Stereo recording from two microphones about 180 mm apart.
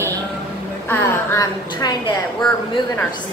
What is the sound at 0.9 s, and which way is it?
A woman's voice, 15° left (ahead or behind).